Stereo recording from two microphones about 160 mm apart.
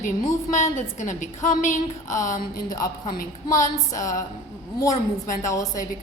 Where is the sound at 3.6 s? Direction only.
20° left (ahead or behind).